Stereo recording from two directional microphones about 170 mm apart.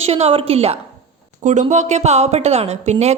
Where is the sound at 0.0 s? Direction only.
35° right (ahead or behind).